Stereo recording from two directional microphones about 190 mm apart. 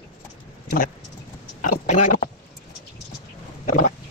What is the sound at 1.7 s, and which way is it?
Speech, 40° left (ahead or behind).